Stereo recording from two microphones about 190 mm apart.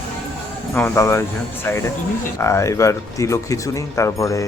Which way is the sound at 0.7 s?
15° left (ahead or behind).